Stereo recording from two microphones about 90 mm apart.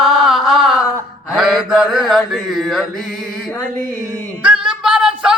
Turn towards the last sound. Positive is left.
turn(degrees=-10)  # may be behind; listen again after turning